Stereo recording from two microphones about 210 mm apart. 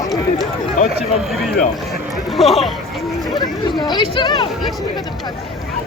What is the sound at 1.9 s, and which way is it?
Chatter, centre (ahead or behind).